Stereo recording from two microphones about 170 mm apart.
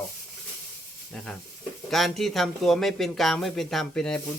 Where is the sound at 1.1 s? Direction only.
5° left (ahead or behind).